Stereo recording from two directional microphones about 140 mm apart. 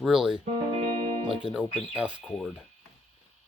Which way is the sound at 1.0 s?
40° right (ahead or behind).